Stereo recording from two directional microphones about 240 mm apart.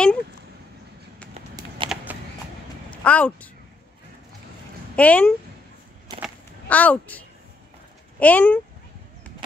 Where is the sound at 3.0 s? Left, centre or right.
Centre.